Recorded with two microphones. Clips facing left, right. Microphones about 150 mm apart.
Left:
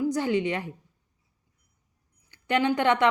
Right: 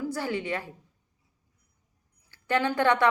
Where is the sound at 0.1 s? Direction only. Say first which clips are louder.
Left 5 dB; 20° left (ahead or behind).